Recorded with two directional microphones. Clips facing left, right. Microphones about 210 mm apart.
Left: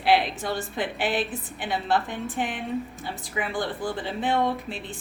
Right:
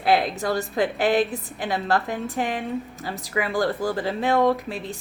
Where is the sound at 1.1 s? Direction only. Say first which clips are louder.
Right 6 dB; 40° right (ahead or behind).